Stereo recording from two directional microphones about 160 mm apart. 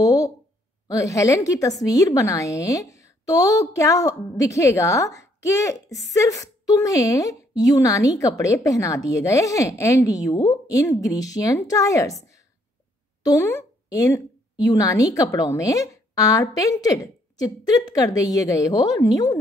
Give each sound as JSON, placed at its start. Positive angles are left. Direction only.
{"t": 0.0, "sound": "a sound", "side_deg": 20}
{"t": 0.8, "sound": "a woman's voice", "side_deg": 20}
{"t": 13.2, "sound": "a woman's voice", "side_deg": 20}